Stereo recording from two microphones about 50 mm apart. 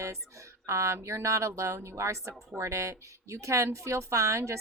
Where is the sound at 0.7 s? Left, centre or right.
Right.